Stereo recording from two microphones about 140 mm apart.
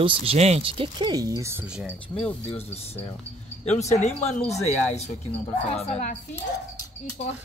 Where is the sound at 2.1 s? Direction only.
20° left (ahead or behind).